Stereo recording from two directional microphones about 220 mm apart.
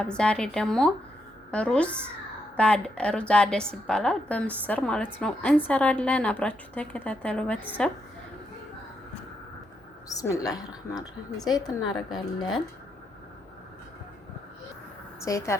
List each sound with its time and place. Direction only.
0.0 s a woman's voice: 5° left (ahead or behind)
10.1 s a woman's voice: 15° left (ahead or behind)
15.2 s a woman's voice: 15° left (ahead or behind)